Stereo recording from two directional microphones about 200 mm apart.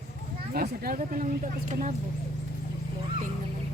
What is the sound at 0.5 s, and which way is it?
Speech, 50° right (ahead or behind).